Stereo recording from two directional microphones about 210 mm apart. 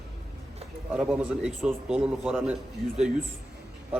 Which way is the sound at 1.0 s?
Centre (ahead or behind).